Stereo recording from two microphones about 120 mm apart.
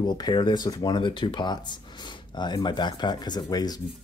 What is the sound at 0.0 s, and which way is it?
Speech, 35° left (ahead or behind).